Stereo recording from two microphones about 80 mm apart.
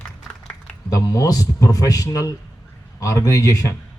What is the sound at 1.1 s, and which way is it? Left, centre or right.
Speech, left.